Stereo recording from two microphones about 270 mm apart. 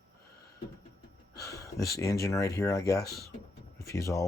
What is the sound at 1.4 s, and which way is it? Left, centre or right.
Speech, centre.